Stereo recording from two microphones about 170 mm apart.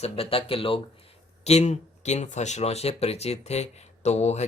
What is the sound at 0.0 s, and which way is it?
Speech, 35° left (ahead or behind).